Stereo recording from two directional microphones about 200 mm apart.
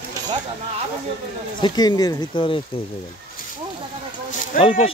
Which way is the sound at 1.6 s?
20° left (ahead or behind).